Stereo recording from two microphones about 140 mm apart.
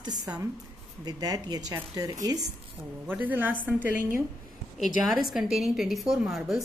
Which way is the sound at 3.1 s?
15° right (ahead or behind).